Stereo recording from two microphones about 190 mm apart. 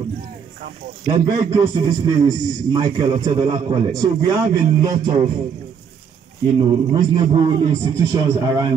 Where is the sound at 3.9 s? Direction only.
20° right (ahead or behind).